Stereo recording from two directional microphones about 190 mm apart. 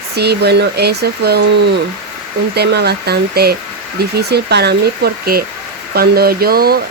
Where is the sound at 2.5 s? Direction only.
60° right (ahead or behind).